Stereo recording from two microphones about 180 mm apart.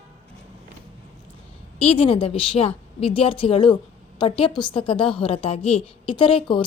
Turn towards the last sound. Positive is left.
turn(degrees=30)  # may be behind; listen again after turning